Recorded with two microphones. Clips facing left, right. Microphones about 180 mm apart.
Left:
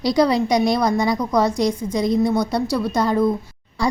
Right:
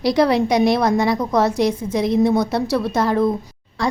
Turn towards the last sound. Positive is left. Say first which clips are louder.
# left 1 dB
turn(degrees=0)  # may be behind; listen again after turning